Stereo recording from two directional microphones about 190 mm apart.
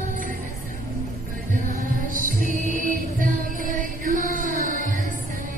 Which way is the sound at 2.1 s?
45° right (ahead or behind).